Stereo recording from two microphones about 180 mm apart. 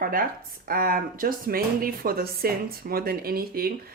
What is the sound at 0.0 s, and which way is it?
A woman's voice, 50° right (ahead or behind).